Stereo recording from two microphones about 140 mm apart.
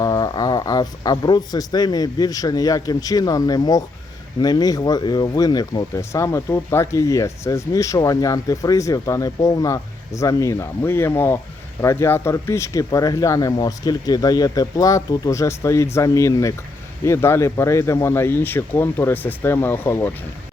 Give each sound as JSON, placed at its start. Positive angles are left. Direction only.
{"t": 0.0, "sound": "speech", "side_deg": 25}